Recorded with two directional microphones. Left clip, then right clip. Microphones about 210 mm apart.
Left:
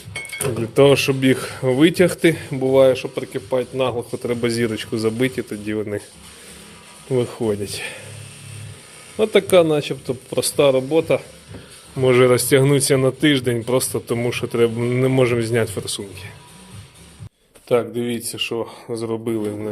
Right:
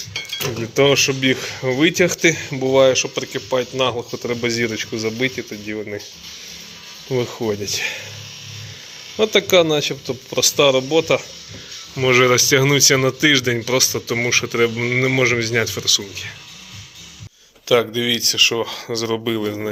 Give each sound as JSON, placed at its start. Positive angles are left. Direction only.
{"t": 0.6, "sound": "speech", "side_deg": 20}
{"t": 7.1, "sound": "speech", "side_deg": 15}
{"t": 9.1, "sound": "speech", "side_deg": 10}
{"t": 17.7, "sound": "speech", "side_deg": 5}